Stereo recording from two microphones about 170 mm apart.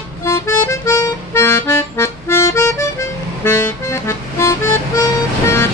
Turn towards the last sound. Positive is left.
turn(degrees=15)  # may be behind; listen again after turning